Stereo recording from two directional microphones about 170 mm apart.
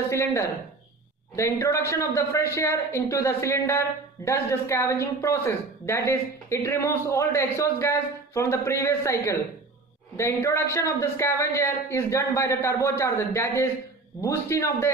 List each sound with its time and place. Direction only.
0.1 s a man's voice: 15° left (ahead or behind)